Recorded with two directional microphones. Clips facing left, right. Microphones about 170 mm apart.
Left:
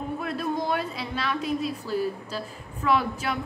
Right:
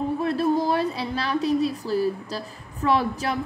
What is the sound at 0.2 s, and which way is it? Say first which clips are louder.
A woman's voice: right 7 dB; 35° right (ahead or behind).